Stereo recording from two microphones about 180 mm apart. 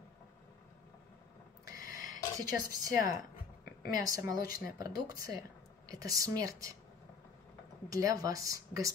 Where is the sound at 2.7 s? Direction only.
20° right (ahead or behind).